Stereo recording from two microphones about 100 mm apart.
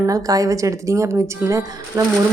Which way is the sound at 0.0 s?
35° right (ahead or behind).